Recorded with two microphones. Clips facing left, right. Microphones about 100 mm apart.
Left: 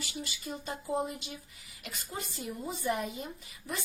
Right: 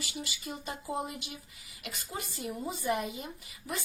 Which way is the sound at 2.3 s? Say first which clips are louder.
Right 3 dB; 5° right (ahead or behind).